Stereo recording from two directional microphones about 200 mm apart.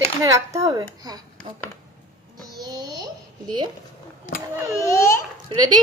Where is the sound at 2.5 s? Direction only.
20° right (ahead or behind).